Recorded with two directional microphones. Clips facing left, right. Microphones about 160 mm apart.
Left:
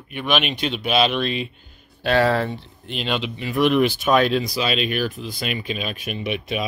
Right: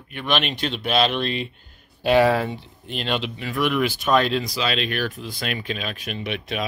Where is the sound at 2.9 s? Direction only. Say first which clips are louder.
Left 1 dB; centre (ahead or behind).